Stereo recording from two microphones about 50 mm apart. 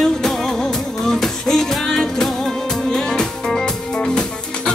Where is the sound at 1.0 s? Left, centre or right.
Centre.